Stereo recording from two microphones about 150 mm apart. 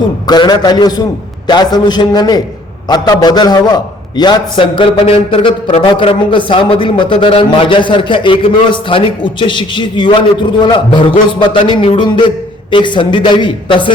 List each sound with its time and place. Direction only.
0.3 s a man's voice: 30° left (ahead or behind)